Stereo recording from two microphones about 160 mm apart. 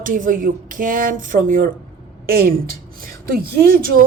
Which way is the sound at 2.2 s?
65° right (ahead or behind).